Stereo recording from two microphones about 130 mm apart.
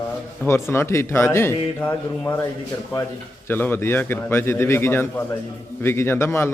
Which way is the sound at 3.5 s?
15° left (ahead or behind).